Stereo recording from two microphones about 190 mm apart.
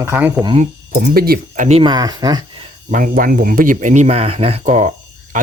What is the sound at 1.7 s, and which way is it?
Speech, 30° right (ahead or behind).